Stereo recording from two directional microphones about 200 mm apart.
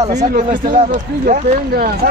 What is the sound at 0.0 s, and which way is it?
Speech, 35° right (ahead or behind).